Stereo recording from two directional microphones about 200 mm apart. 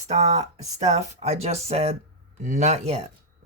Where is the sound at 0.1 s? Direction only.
35° right (ahead or behind).